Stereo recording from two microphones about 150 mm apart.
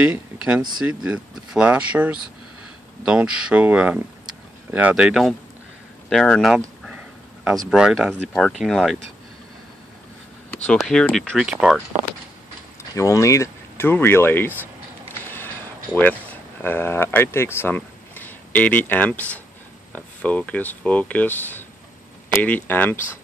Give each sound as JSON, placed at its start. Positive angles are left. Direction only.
{"t": 0.0, "sound": "speech", "side_deg": -10}
{"t": 6.8, "sound": "a sound", "side_deg": -5}
{"t": 7.7, "sound": "speech", "side_deg": -5}
{"t": 8.1, "sound": "speech", "side_deg": 5}
{"t": 10.8, "sound": "speech", "side_deg": 5}
{"t": 12.9, "sound": "speech", "side_deg": 20}
{"t": 15.3, "sound": "a sound", "side_deg": 10}
{"t": 19.9, "sound": "speech", "side_deg": 10}